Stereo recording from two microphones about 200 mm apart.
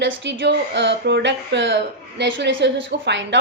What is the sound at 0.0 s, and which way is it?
Speech, 60° right (ahead or behind).